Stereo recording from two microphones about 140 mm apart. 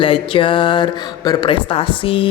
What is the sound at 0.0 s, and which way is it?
A man's voice, 40° left (ahead or behind).